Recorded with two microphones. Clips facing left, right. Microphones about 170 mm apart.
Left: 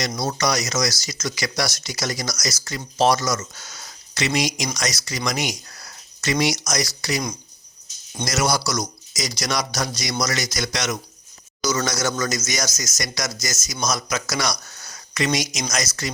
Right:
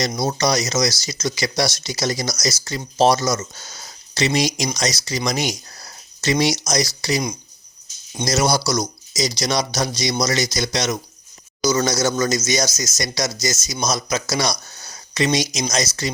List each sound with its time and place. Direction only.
0.1 s speech: 25° right (ahead or behind)
8.2 s speech: 30° right (ahead or behind)